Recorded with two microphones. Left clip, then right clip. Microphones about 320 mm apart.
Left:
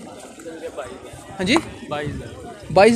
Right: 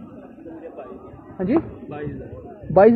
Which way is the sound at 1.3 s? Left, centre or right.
Left.